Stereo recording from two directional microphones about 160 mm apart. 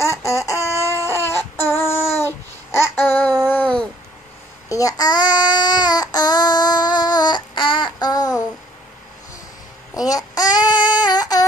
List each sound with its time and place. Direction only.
0.0 s a sound: 20° left (ahead or behind)
2.2 s babbling: 15° left (ahead or behind)
4.6 s child singing: 20° left (ahead or behind)
9.9 s child singing: 25° left (ahead or behind)